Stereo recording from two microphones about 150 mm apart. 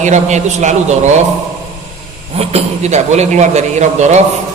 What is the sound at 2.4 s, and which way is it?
A man's voice, 40° right (ahead or behind).